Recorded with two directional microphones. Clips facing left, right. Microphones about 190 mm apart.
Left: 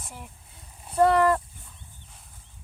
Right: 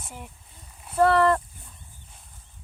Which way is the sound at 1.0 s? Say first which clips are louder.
Even; 15° left (ahead or behind).